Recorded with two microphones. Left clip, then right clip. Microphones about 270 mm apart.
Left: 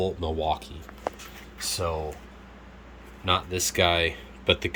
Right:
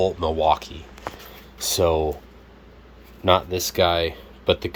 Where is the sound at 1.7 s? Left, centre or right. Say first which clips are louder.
Right 9 dB; right.